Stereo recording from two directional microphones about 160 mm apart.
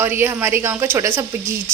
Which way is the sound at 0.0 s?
15° right (ahead or behind).